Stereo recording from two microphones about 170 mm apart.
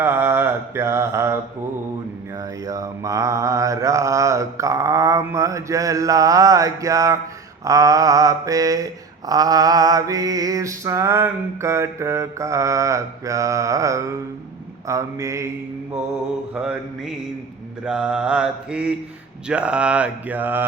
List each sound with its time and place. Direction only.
0.0 s mantra: 15° right (ahead or behind)
2.4 s mantra: 20° right (ahead or behind)
16.6 s mantra: 5° right (ahead or behind)